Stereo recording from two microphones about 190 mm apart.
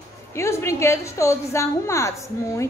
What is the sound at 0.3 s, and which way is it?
A woman's voice, 15° left (ahead or behind).